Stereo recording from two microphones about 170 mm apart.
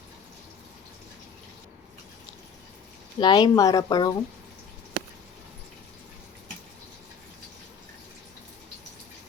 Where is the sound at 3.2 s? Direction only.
25° left (ahead or behind).